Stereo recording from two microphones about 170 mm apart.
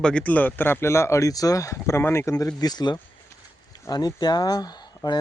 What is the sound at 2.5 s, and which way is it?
Speech, 25° left (ahead or behind).